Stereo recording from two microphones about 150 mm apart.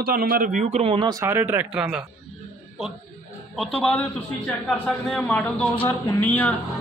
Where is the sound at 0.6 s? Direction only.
45° right (ahead or behind).